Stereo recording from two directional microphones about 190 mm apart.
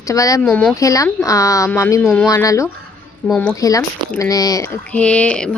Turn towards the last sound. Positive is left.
turn(degrees=5)  # may be behind; listen again after turning